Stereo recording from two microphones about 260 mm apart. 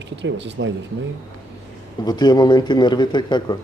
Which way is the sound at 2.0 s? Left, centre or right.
Centre.